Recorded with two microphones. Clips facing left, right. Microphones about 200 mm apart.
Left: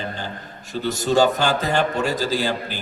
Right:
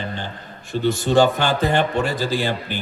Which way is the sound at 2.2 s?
40° left (ahead or behind).